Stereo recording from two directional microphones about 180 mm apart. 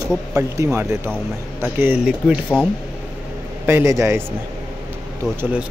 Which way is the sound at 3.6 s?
15° right (ahead or behind).